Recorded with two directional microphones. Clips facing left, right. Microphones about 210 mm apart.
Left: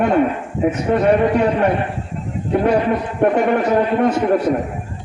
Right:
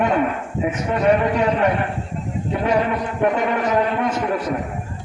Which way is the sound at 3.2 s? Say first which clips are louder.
Left 4 dB; 35° left (ahead or behind).